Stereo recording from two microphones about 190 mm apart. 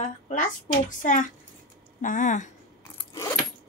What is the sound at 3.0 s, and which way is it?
Keys jangling, 20° left (ahead or behind).